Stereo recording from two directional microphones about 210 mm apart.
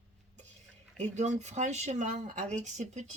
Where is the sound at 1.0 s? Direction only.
35° right (ahead or behind).